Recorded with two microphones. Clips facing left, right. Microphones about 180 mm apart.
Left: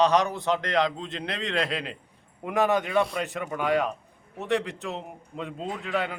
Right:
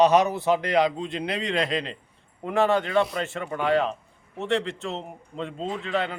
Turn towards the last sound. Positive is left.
turn(degrees=10)  # may be behind; listen again after turning